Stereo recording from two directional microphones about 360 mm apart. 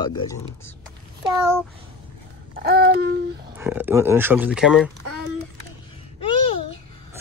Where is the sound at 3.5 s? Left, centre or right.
Centre.